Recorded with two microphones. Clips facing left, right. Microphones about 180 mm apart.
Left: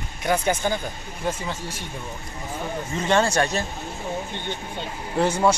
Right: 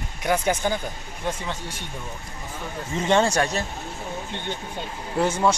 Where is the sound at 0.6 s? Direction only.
10° right (ahead or behind).